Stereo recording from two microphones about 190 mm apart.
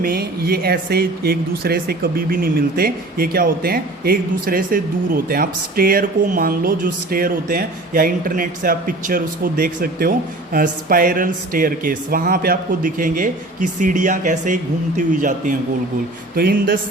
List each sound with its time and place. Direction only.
0.0 s speech: 50° right (ahead or behind)